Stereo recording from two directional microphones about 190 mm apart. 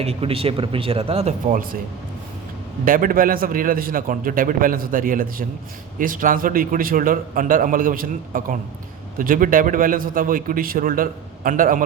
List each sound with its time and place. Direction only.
0.0 s speech: 30° right (ahead or behind)
2.8 s a man's voice: 45° right (ahead or behind)